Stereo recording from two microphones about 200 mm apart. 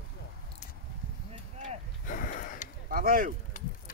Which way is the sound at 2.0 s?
45° left (ahead or behind).